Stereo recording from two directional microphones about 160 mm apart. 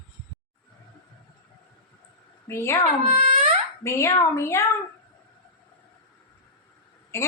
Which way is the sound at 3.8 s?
15° left (ahead or behind).